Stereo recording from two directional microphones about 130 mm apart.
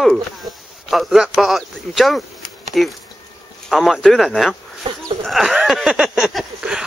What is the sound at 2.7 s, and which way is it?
Bee, centre (ahead or behind).